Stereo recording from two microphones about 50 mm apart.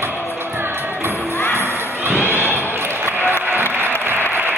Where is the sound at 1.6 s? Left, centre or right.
Right.